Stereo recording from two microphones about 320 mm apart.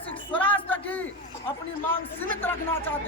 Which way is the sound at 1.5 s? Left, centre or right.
Centre.